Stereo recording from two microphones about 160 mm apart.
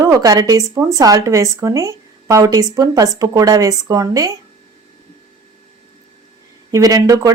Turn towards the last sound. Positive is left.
turn(degrees=-20)  # may be behind; listen again after turning